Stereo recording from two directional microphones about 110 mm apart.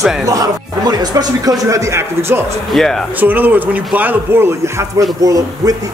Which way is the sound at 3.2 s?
15° right (ahead or behind).